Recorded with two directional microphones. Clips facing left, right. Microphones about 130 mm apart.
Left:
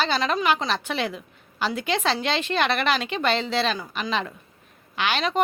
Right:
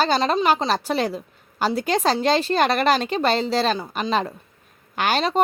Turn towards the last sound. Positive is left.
turn(degrees=-40)  # may be behind; listen again after turning